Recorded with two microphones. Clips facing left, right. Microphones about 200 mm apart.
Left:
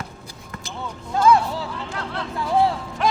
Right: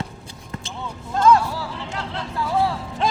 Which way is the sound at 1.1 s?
10° left (ahead or behind).